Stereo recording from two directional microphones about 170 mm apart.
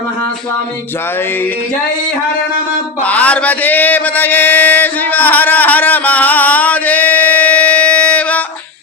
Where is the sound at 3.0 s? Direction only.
10° left (ahead or behind).